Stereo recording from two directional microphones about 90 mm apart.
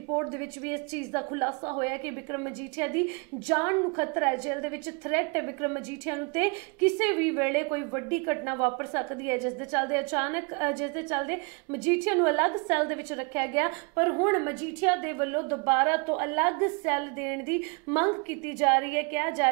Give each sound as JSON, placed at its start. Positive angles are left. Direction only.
{"t": 0.1, "sound": "a woman's voice", "side_deg": -25}